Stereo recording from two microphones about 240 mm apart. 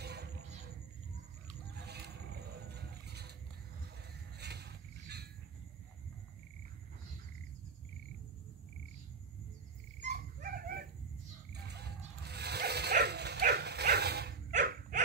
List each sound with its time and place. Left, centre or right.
0.0 s music: right
1.8 s a sound: right
4.4 s a sound: right
9.9 s dog: right
11.5 s music: right
12.2 s dog: right